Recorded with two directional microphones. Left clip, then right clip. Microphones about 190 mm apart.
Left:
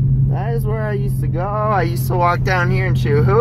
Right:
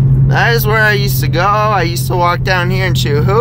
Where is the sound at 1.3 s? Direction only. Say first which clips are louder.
Right 7 dB; 15° right (ahead or behind).